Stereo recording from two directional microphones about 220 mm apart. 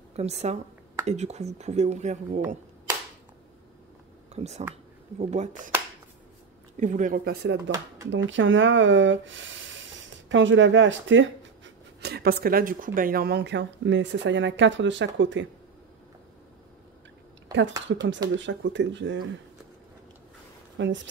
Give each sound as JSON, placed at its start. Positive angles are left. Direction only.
{"t": 0.1, "sound": "a woman's voice", "side_deg": -30}
{"t": 4.3, "sound": "speech", "side_deg": -30}
{"t": 6.8, "sound": "speech", "side_deg": -35}
{"t": 8.1, "sound": "speech", "side_deg": -55}
{"t": 17.5, "sound": "a sound", "side_deg": -55}
{"t": 18.3, "sound": "speech", "side_deg": -55}
{"t": 20.7, "sound": "speech", "side_deg": -55}